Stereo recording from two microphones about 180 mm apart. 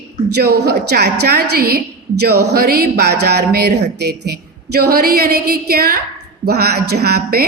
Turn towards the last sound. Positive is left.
turn(degrees=-60)  # may be behind; listen again after turning